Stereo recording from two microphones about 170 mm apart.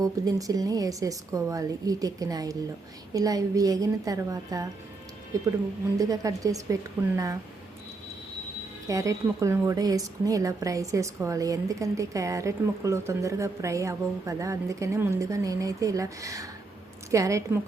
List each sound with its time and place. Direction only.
0.0 s a woman's voice: 20° right (ahead or behind)
6.0 s a woman's voice: 20° right (ahead or behind)
8.9 s a woman's voice: 20° right (ahead or behind)